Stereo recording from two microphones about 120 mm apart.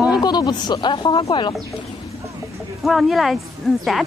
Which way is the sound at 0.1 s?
35° left (ahead or behind).